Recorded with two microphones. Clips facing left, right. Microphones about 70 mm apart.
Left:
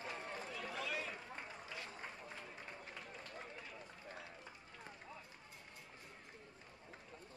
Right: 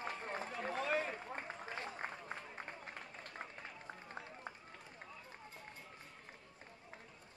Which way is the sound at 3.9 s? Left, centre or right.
Right.